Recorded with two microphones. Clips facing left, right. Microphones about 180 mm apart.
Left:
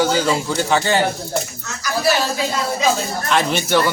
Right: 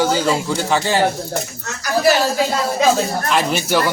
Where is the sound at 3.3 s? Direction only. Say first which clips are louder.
Left 1 dB; 5° right (ahead or behind).